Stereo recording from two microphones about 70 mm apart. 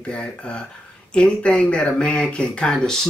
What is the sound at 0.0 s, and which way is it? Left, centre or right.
Speech, centre.